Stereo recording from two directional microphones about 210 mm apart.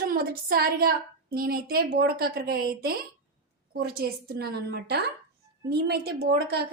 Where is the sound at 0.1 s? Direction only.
45° right (ahead or behind).